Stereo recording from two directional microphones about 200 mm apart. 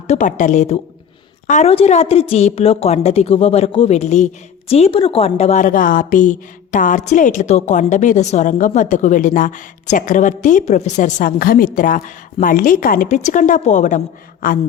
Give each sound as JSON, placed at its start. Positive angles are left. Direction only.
{"t": 0.1, "sound": "a woman's voice", "side_deg": 40}